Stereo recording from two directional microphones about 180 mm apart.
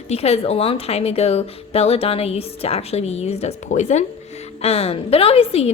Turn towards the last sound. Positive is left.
turn(degrees=35)  # may be behind; listen again after turning